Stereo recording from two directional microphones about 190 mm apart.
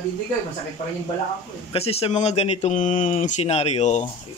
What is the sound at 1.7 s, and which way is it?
A man's voice, 30° left (ahead or behind).